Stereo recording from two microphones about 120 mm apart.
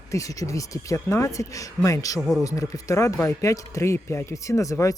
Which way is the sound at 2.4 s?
30° left (ahead or behind).